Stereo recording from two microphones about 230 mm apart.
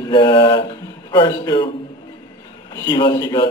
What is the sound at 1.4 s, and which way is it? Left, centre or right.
Speech, centre.